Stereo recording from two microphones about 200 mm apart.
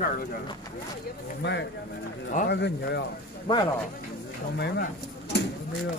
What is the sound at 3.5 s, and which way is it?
Speech, 25° left (ahead or behind).